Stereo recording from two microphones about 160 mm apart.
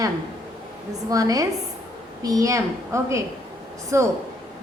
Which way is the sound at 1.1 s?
20° right (ahead or behind).